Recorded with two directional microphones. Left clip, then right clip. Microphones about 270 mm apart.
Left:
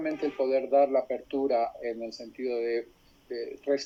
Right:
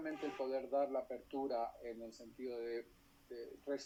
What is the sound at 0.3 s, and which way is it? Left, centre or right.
Speech, left.